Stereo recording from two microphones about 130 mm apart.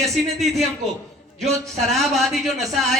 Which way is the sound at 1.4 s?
Centre (ahead or behind).